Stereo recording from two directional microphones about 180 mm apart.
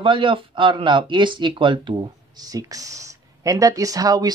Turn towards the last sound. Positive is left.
turn(degrees=-20)  # may be behind; listen again after turning